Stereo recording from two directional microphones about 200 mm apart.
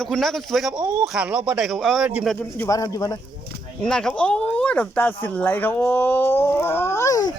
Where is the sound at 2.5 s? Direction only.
15° left (ahead or behind).